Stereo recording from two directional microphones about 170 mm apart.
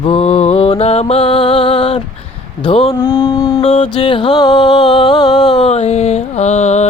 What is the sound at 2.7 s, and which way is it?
Music, 30° left (ahead or behind).